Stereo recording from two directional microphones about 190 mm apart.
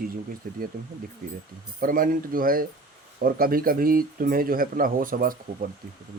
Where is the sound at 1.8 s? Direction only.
45° right (ahead or behind).